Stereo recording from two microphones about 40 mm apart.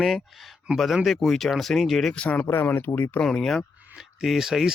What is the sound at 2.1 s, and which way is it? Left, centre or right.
Speech, left.